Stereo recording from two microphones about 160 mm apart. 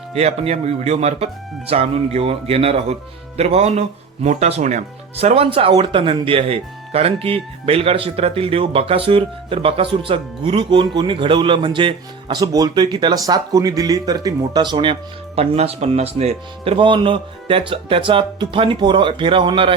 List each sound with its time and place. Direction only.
0.1 s speech: 40° right (ahead or behind)